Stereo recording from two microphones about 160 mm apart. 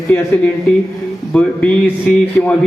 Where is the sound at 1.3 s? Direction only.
5° left (ahead or behind).